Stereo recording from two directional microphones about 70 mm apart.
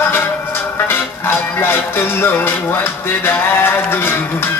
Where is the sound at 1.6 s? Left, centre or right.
Left.